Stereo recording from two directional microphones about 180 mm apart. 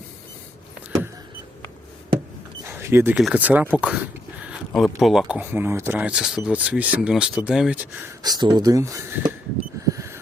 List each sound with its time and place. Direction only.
2.6 s power windows: 15° right (ahead or behind)
3.2 s speech: 10° right (ahead or behind)
8.2 s speech: 25° right (ahead or behind)
9.8 s a sound: 15° right (ahead or behind)